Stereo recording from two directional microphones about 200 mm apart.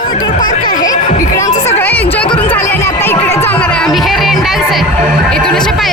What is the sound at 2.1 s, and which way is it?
Chatter, 5° left (ahead or behind).